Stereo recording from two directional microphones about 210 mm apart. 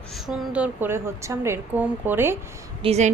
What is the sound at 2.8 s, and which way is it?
Speech, 30° right (ahead or behind).